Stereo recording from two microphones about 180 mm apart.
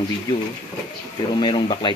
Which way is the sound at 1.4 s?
25° left (ahead or behind).